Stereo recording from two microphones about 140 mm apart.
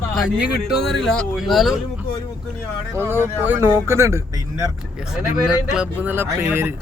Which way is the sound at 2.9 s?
15° right (ahead or behind).